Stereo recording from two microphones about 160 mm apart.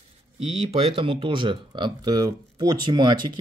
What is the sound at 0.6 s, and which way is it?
Speech, 40° right (ahead or behind).